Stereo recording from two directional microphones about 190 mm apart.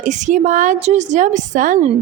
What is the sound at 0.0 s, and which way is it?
A woman's voice, 40° right (ahead or behind).